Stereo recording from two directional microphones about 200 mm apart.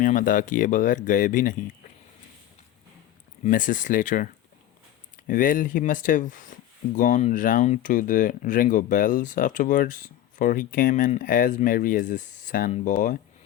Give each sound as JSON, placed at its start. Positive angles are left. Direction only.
{"t": 0.0, "sound": "speech", "side_deg": 40}
{"t": 3.4, "sound": "speech", "side_deg": 40}
{"t": 5.3, "sound": "speech", "side_deg": 45}